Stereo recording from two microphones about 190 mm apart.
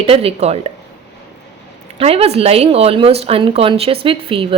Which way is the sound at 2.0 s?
30° right (ahead or behind).